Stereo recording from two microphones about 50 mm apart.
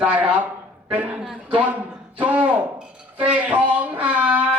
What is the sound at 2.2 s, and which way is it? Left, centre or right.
A man's voice, right.